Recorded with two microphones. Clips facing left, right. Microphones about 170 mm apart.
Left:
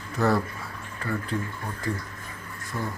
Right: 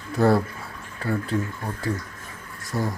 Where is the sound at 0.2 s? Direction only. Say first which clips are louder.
Right 4 dB; 30° right (ahead or behind).